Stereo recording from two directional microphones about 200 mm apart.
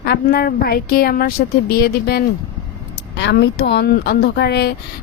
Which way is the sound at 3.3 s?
55° left (ahead or behind).